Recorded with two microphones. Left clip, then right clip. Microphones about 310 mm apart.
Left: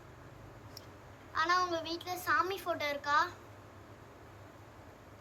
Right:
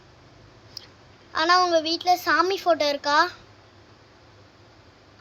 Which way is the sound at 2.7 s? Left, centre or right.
Right.